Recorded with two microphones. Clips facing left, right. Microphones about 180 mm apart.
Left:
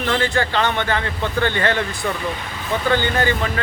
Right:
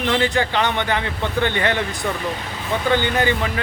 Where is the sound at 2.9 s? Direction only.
15° right (ahead or behind).